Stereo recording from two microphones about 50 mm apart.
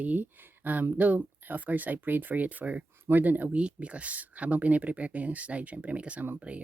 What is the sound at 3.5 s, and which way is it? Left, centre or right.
Speech, right.